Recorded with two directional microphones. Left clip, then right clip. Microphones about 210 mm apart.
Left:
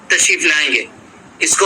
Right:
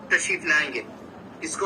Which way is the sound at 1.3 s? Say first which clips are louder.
Left 17 dB; 55° left (ahead or behind).